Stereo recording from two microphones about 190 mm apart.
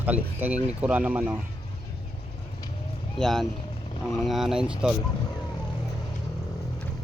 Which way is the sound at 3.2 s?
Centre (ahead or behind).